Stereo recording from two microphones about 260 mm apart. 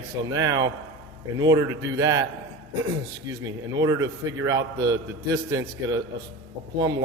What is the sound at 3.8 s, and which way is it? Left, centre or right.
A man's voice, centre.